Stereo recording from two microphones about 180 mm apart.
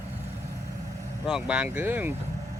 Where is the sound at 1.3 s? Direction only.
5° right (ahead or behind).